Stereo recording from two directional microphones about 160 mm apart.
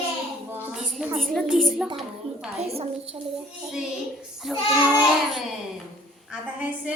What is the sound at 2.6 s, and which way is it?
Speech, 40° right (ahead or behind).